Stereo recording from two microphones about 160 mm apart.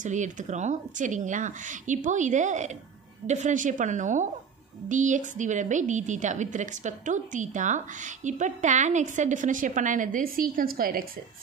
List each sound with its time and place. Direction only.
0.0 s a woman's voice: 50° right (ahead or behind)